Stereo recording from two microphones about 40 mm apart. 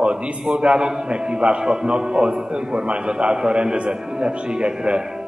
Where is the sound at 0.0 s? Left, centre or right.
Right.